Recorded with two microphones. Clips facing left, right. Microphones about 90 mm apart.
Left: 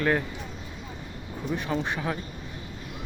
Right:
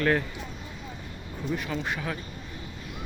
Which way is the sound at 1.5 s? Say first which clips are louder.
Left 4 dB; 25° left (ahead or behind).